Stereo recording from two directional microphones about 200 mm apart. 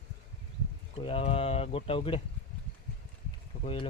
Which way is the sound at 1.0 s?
30° left (ahead or behind).